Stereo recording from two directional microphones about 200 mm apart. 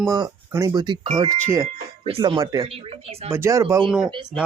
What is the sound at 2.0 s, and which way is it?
Speech, 30° right (ahead or behind).